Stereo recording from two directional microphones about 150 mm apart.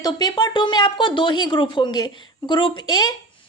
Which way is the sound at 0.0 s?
30° left (ahead or behind).